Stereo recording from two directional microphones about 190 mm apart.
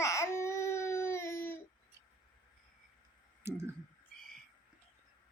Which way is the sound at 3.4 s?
15° right (ahead or behind).